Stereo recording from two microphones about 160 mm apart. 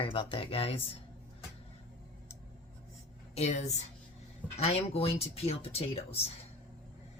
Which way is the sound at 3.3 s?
45° left (ahead or behind).